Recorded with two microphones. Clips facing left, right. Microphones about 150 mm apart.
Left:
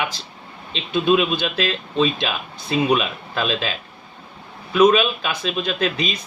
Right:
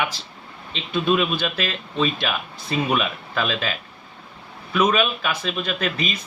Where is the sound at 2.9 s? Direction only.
20° left (ahead or behind).